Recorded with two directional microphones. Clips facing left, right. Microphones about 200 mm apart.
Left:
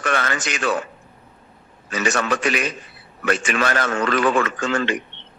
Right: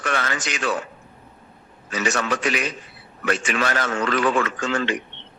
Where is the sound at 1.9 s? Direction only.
55° left (ahead or behind).